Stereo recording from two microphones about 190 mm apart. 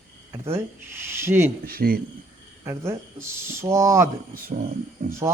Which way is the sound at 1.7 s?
50° right (ahead or behind).